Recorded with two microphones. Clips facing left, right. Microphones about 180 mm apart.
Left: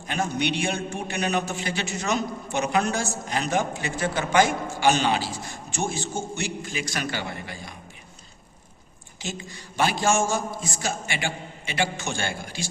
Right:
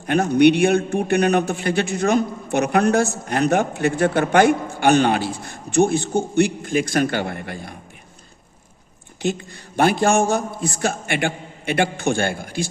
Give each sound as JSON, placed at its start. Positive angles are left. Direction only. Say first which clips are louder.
{"t": 0.0, "sound": "a man's voice", "louder": "right 12 dB", "side_deg": -60}
{"t": 9.2, "sound": "a man's voice", "louder": "right 11 dB", "side_deg": -55}